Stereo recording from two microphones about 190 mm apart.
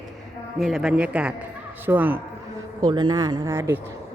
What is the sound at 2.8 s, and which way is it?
Speech, 25° right (ahead or behind).